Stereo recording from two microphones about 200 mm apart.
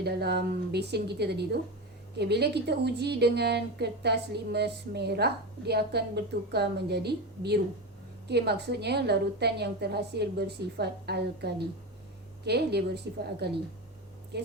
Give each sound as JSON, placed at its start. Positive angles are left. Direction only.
{"t": 0.0, "sound": "a woman's voice", "side_deg": -55}